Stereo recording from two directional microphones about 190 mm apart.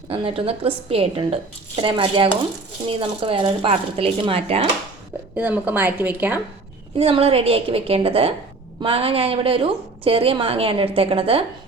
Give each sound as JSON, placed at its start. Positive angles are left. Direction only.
{"t": 0.1, "sound": "a woman's voice", "side_deg": -30}
{"t": 5.4, "sound": "a woman's voice", "side_deg": -10}
{"t": 6.9, "sound": "a woman's voice", "side_deg": -30}